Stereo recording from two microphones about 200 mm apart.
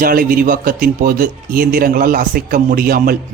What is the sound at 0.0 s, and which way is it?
A man's voice, 45° right (ahead or behind).